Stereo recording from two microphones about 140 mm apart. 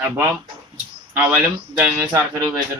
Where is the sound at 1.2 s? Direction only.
10° right (ahead or behind).